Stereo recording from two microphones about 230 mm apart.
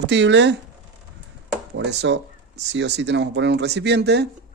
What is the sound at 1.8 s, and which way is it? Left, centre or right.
Speech, right.